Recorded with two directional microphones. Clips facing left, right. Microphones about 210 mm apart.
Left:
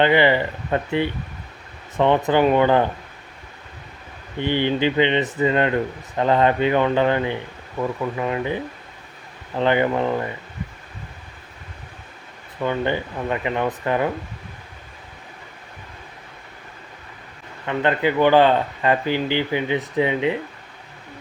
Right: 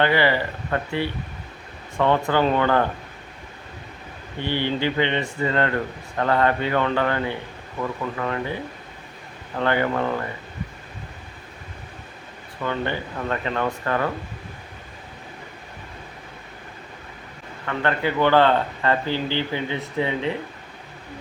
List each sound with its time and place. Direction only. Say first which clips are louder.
0.0 s speech: left 3 dB; 20° left (ahead or behind)
4.4 s speech: left 4 dB; 15° left (ahead or behind)
9.6 s speech: left 3 dB; 20° left (ahead or behind)
12.6 s speech: left 4 dB; 15° left (ahead or behind)
17.7 s speech: left 3 dB; 15° left (ahead or behind)